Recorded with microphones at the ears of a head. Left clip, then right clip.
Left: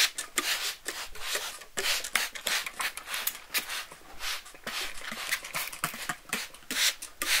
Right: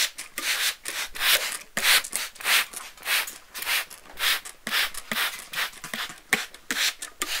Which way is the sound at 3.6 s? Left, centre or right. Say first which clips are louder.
Right 10 dB; right.